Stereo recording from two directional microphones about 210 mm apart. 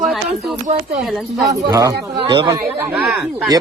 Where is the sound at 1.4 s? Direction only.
15° right (ahead or behind).